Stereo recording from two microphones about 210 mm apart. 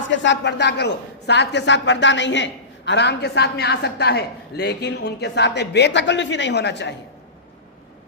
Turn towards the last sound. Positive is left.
turn(degrees=55)  # may be behind; listen again after turning